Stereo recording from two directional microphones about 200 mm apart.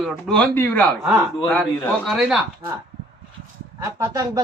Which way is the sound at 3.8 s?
15° right (ahead or behind).